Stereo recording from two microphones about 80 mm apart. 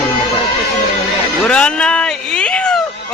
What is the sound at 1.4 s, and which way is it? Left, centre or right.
Cat, centre.